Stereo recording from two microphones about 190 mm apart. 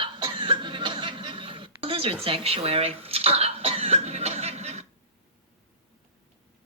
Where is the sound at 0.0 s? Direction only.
25° right (ahead or behind).